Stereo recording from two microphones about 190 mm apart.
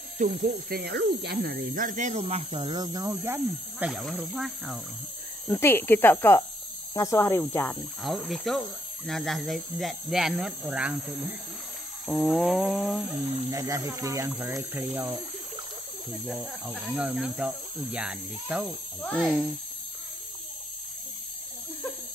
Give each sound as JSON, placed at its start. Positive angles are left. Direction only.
{"t": 0.2, "sound": "speech", "side_deg": -45}
{"t": 5.5, "sound": "speech", "side_deg": 10}
{"t": 8.0, "sound": "speech", "side_deg": 0}
{"t": 12.1, "sound": "speech", "side_deg": 5}
{"t": 13.5, "sound": "speech", "side_deg": -15}
{"t": 16.3, "sound": "speech", "side_deg": -5}
{"t": 18.9, "sound": "speech", "side_deg": 5}